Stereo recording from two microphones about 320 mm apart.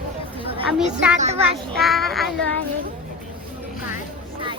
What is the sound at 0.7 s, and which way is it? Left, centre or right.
Speech, centre.